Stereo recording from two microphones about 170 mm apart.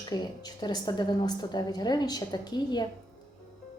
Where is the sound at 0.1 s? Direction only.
25° left (ahead or behind).